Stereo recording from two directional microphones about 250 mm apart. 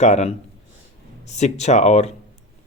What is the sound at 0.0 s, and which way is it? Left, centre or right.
Speech, left.